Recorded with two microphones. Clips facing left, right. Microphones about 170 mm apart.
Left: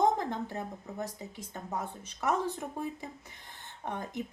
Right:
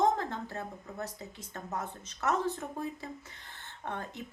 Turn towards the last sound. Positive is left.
turn(degrees=15)  # may be behind; listen again after turning